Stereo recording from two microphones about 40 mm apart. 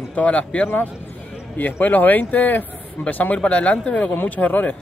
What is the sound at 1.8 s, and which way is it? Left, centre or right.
A man's voice, left.